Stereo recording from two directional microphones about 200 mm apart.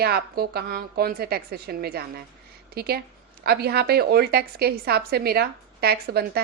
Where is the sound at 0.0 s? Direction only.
50° right (ahead or behind).